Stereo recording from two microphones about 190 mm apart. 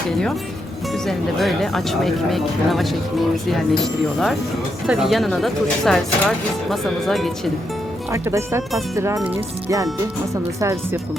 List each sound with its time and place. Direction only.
1.0 s speech: centre (ahead or behind)
4.9 s speech: centre (ahead or behind)
8.1 s speech: 15° right (ahead or behind)